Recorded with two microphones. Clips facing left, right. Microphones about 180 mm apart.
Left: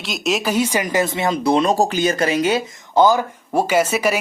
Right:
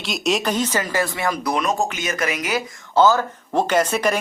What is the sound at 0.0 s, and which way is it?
Speech, centre (ahead or behind).